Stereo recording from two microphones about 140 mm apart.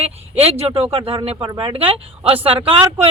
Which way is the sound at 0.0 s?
45° right (ahead or behind).